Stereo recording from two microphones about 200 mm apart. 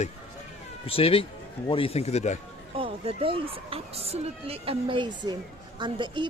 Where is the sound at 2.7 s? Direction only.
25° right (ahead or behind).